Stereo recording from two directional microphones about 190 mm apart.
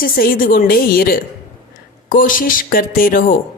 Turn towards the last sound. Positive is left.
turn(degrees=50)  # may be behind; listen again after turning